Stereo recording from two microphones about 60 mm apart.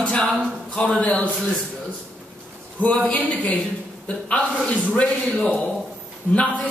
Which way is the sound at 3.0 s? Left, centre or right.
Centre.